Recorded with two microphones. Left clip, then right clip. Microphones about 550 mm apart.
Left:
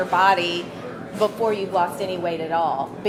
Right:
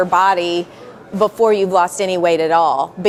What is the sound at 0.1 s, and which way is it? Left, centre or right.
Speech, right.